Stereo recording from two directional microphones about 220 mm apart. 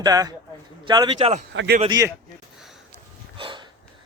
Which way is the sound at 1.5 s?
60° right (ahead or behind).